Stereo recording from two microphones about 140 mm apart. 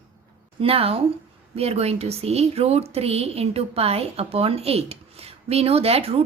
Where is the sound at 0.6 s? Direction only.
45° right (ahead or behind).